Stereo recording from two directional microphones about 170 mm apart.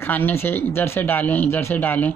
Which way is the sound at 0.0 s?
10° left (ahead or behind).